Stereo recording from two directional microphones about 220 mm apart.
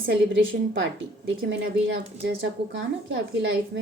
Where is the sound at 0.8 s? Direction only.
55° right (ahead or behind).